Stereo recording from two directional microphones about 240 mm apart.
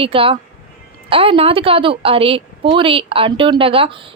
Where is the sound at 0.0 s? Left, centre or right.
Right.